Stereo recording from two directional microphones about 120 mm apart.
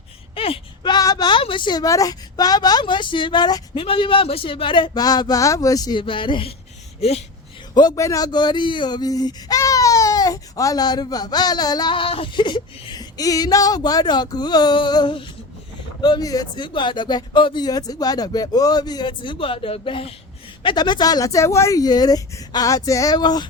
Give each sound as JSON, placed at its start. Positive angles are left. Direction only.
{"t": 0.3, "sound": "speech", "side_deg": 50}
{"t": 6.0, "sound": "speech", "side_deg": 45}
{"t": 7.7, "sound": "speech", "side_deg": 35}